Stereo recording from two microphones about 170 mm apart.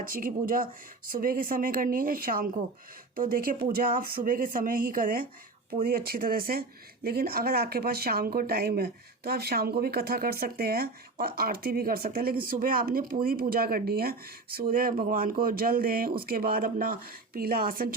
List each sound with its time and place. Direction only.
0.0 s speech: 55° right (ahead or behind)